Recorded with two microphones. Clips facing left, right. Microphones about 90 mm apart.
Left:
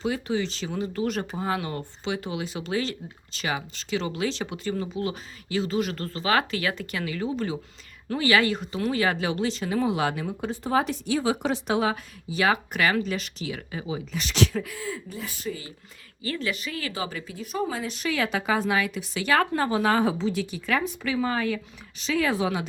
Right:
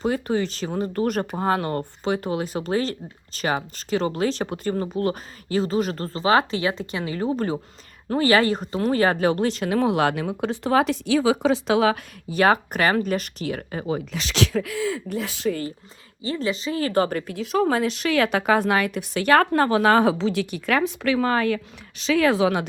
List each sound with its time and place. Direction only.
0.0 s a woman's voice: 45° right (ahead or behind); by 11.9 s 90° right
12.3 s speech: 45° right (ahead or behind); by 15.5 s 85° right
16.2 s speech: 25° right (ahead or behind)
16.9 s speech: 50° right (ahead or behind); by 22.6 s 70° right (ahead or behind)